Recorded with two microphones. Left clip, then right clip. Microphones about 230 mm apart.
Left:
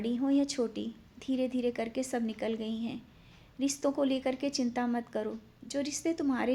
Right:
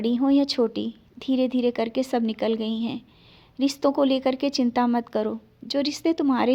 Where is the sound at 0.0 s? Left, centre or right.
Right.